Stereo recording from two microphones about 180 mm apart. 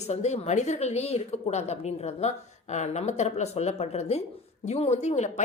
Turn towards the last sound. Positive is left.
turn(degrees=40)  # may be behind; listen again after turning